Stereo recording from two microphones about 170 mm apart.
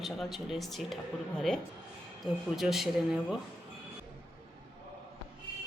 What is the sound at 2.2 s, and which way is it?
Speech, centre (ahead or behind).